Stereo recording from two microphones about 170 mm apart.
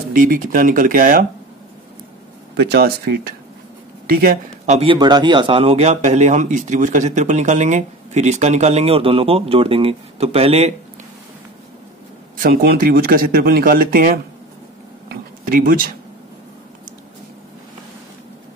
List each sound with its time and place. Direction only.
0.1 s speech: 55° right (ahead or behind)
2.5 s speech: 70° right (ahead or behind)
4.6 s speech: 35° right (ahead or behind)
4.9 s speech: 25° right (ahead or behind)
12.4 s speech: 60° right (ahead or behind)
15.0 s a sound: 55° right (ahead or behind)